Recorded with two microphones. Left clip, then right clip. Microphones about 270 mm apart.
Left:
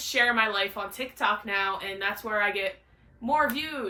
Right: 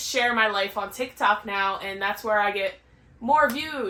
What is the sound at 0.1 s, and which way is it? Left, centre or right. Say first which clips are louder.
Speech: right 1 dB; centre.